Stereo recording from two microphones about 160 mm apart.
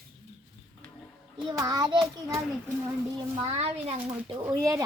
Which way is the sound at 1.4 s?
25° right (ahead or behind).